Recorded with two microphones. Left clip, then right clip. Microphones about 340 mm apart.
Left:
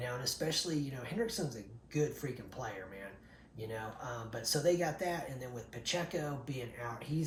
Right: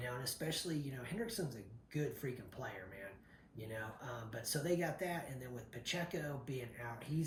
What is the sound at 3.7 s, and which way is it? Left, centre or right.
Speech, centre.